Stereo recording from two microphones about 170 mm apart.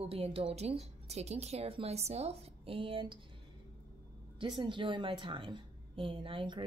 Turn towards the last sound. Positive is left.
turn(degrees=-30)  # may be behind; listen again after turning